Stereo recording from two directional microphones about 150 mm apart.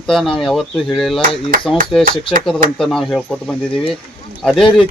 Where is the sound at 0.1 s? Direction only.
5° left (ahead or behind).